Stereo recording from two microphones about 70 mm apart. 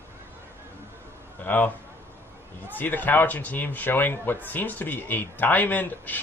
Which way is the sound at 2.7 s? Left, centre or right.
Left.